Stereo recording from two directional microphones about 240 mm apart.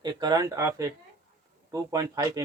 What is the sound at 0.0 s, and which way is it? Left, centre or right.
Speech, centre.